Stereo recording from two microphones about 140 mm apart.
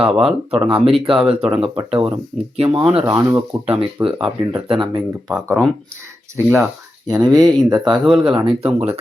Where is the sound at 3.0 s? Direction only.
15° right (ahead or behind).